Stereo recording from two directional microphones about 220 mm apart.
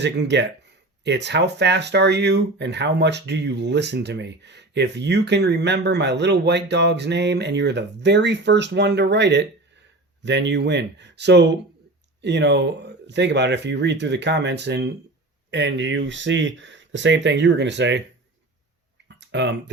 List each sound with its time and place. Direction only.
0.0 s speech: 50° right (ahead or behind)
19.0 s clicking: 50° right (ahead or behind)